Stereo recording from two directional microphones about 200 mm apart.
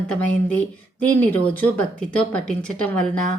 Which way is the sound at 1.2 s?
10° left (ahead or behind).